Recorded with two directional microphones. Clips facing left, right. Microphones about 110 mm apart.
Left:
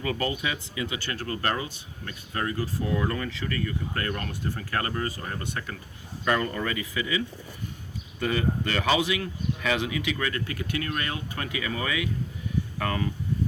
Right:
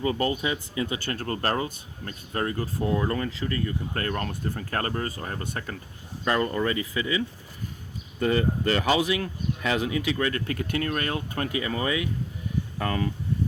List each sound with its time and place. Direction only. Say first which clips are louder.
0.0 s speech: right 3 dB; 30° right (ahead or behind)
8.2 s speech: right 3 dB; 35° right (ahead or behind)